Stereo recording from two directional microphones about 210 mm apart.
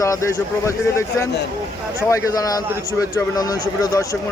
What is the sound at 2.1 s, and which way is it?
A man's voice, 15° left (ahead or behind).